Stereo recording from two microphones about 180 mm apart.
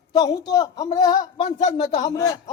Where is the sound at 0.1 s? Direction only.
25° left (ahead or behind).